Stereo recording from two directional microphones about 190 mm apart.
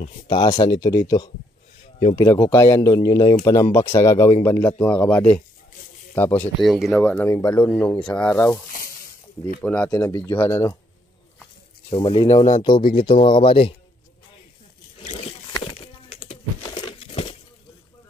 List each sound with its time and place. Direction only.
0.3 s speech: 20° left (ahead or behind)
9.6 s speech: 5° left (ahead or behind)
11.9 s speech: 30° left (ahead or behind)
15.1 s a sound: 25° left (ahead or behind)